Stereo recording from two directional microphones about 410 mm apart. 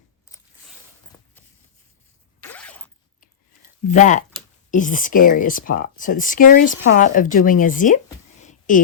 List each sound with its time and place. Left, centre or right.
2.4 s zipper: centre
3.2 s a sound: centre
4.7 s speech: centre